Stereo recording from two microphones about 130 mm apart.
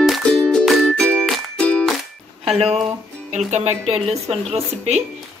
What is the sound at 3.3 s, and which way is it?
Speech, 65° right (ahead or behind).